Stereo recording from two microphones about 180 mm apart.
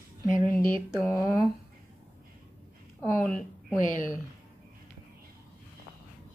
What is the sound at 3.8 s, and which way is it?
Speech, 45° left (ahead or behind).